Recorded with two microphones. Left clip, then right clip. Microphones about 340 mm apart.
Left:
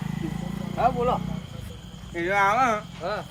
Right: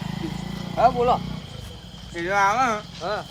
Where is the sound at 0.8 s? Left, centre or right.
Centre.